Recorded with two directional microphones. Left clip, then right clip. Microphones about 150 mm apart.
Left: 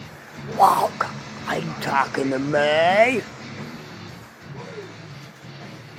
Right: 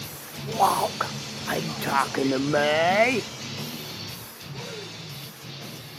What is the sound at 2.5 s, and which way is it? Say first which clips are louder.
Speech: left 4 dB; 5° right (ahead or behind).